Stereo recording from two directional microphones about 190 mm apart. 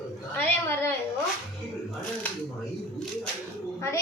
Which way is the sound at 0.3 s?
10° left (ahead or behind).